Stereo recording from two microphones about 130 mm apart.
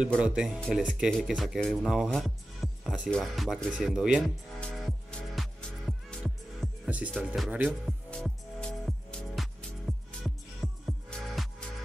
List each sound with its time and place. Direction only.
0.2 s speech: 5° right (ahead or behind)
4.6 s music: centre (ahead or behind)
6.2 s music: 10° right (ahead or behind)
7.2 s speech: centre (ahead or behind)
7.8 s music: 5° left (ahead or behind)